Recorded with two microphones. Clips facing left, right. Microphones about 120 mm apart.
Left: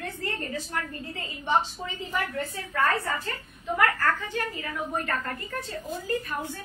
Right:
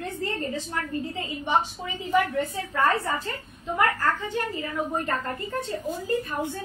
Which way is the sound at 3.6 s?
20° right (ahead or behind).